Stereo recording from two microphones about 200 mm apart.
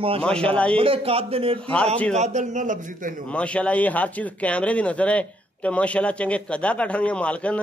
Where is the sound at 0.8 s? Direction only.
30° right (ahead or behind).